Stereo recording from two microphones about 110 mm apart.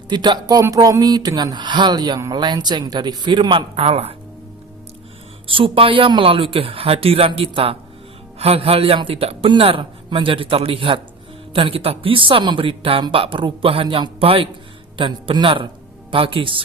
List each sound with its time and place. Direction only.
0.1 s speech: 40° right (ahead or behind); by 4.1 s 65° right (ahead or behind)
5.5 s speech: 55° right (ahead or behind)